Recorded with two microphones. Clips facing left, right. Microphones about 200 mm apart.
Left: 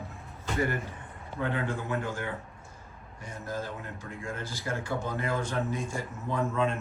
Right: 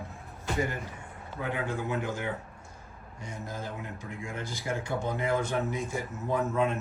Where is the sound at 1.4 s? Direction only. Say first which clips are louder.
Left 1 dB; 10° right (ahead or behind).